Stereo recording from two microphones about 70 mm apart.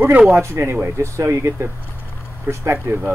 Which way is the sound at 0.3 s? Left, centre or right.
Right.